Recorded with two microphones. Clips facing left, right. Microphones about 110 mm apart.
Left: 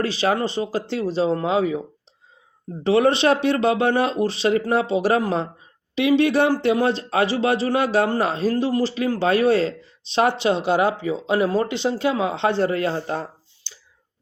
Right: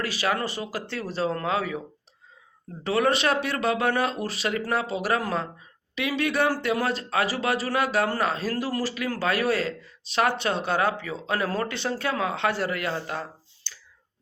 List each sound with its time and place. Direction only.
0.0 s speech: 25° left (ahead or behind)
2.8 s speech: 25° left (ahead or behind)
13.7 s whispering: 20° left (ahead or behind)